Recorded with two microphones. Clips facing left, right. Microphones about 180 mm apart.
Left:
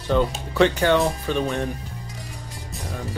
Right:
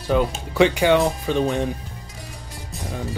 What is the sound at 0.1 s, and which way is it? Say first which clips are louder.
Speech: right 1 dB; 10° right (ahead or behind).